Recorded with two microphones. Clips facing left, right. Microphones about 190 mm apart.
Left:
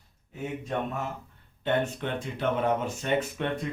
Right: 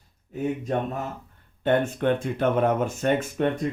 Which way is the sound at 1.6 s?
50° right (ahead or behind).